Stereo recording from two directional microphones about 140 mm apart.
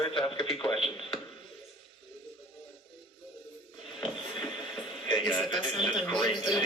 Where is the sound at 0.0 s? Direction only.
35° left (ahead or behind).